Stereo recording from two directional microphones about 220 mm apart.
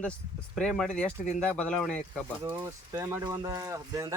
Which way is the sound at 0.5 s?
Centre (ahead or behind).